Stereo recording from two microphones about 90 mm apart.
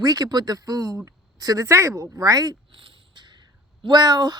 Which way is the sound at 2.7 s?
75° right (ahead or behind).